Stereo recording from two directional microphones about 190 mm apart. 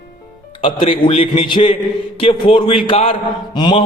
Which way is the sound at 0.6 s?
25° left (ahead or behind).